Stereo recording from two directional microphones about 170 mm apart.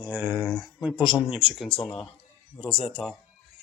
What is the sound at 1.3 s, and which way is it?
Speech, centre (ahead or behind).